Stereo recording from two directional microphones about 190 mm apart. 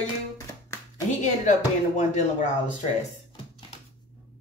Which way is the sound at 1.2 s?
40° left (ahead or behind).